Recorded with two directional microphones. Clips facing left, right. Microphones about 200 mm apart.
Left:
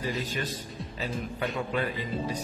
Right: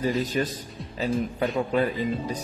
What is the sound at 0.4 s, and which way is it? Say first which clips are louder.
Speech: right 6 dB; 35° right (ahead or behind).